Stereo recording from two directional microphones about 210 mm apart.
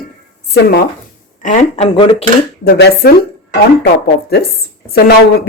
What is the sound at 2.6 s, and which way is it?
Speech, 50° left (ahead or behind).